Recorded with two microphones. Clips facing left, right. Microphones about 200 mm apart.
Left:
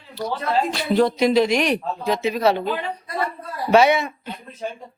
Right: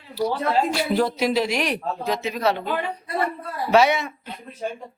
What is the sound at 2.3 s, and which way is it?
Speech, 35° left (ahead or behind).